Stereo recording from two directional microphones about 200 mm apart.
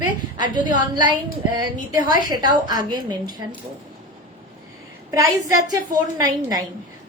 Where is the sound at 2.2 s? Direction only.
20° right (ahead or behind).